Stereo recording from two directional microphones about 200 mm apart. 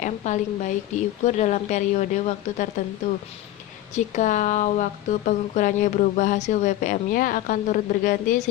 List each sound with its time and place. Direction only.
0.0 s speech: 40° left (ahead or behind)